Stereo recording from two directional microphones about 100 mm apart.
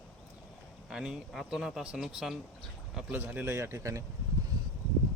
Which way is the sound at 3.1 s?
20° right (ahead or behind).